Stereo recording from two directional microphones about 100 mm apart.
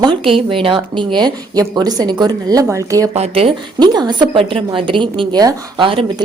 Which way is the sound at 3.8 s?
45° right (ahead or behind).